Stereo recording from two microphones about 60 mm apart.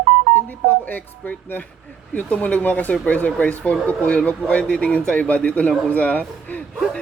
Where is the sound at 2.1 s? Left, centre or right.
Left.